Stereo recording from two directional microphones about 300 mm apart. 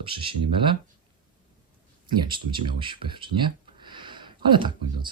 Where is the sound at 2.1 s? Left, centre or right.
Centre.